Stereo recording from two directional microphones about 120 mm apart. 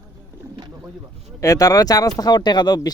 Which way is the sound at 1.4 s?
30° left (ahead or behind).